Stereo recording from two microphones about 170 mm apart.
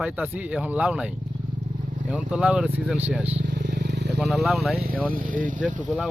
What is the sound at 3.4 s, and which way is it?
Vehicle, 90° right.